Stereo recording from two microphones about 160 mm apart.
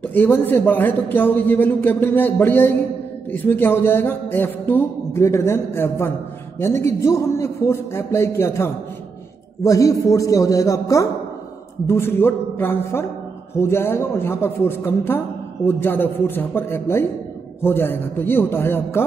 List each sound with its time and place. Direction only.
0.1 s a man's voice: 10° left (ahead or behind)